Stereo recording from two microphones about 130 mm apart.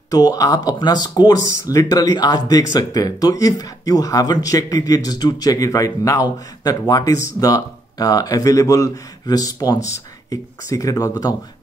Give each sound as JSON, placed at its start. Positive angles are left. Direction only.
{"t": 0.1, "sound": "speech", "side_deg": 25}